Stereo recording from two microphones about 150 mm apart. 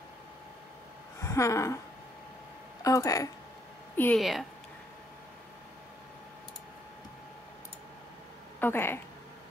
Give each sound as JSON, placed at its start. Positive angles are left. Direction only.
{"t": 1.2, "sound": "a sound", "side_deg": 20}
{"t": 2.8, "sound": "speech", "side_deg": 20}
{"t": 4.2, "sound": "speech", "side_deg": 0}
{"t": 8.5, "sound": "speech", "side_deg": 15}